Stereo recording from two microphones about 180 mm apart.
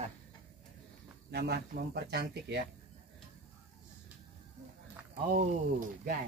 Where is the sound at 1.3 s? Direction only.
65° right (ahead or behind).